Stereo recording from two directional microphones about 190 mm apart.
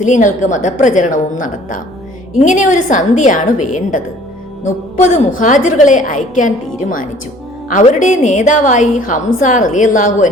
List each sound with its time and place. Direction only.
0.0 s a woman's voice: 40° left (ahead or behind)
5.1 s a woman's voice: 40° left (ahead or behind)